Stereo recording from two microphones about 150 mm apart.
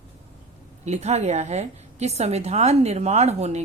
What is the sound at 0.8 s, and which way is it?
Speech, 50° right (ahead or behind).